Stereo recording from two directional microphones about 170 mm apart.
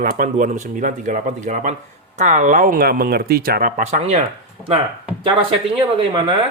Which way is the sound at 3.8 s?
40° right (ahead or behind).